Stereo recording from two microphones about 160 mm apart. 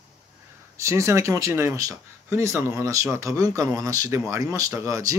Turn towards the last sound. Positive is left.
turn(degrees=-20)  # may be behind; listen again after turning